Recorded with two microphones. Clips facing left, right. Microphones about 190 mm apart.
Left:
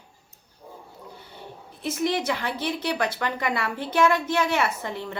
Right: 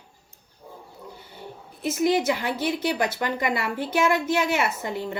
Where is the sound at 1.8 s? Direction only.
5° right (ahead or behind).